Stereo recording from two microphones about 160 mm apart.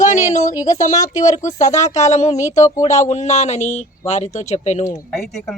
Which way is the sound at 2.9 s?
45° left (ahead or behind).